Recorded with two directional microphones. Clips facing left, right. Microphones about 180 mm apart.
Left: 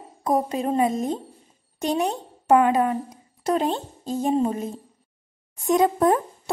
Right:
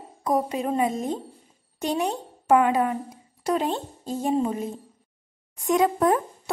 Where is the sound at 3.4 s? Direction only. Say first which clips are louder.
Left 2 dB; 25° left (ahead or behind).